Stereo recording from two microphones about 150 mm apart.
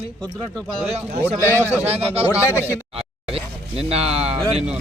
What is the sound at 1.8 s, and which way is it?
Speech, 40° right (ahead or behind).